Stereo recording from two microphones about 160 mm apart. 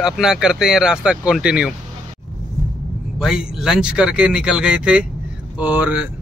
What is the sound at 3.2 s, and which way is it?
Speech, 5° right (ahead or behind).